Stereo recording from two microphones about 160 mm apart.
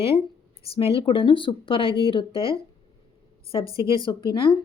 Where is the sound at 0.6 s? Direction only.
35° left (ahead or behind).